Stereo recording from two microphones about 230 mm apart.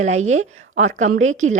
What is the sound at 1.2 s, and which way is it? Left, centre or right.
Speech, right.